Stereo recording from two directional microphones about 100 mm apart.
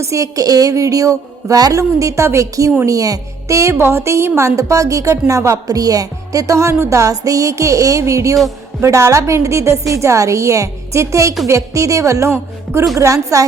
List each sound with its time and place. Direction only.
0.0 s speech: 30° right (ahead or behind)